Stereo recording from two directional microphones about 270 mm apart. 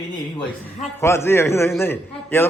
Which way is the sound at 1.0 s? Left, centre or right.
Centre.